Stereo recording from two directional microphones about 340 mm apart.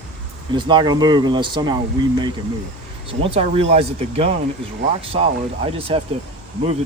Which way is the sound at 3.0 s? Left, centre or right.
Centre.